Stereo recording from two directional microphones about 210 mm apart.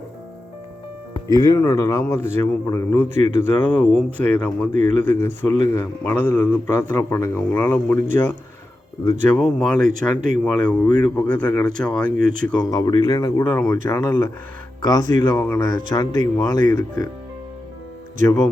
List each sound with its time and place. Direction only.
1.1 s speech: 15° left (ahead or behind)
4.7 s speech: 35° right (ahead or behind)
5.0 s speech: 10° left (ahead or behind)
9.2 s speech: 5° left (ahead or behind)
12.1 s speech: 40° right (ahead or behind)
12.5 s speech: 20° left (ahead or behind)